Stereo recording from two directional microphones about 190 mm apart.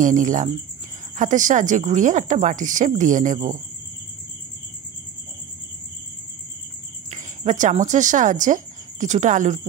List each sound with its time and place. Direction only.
0.0 s speech: 40° right (ahead or behind)
7.1 s speech: 40° right (ahead or behind)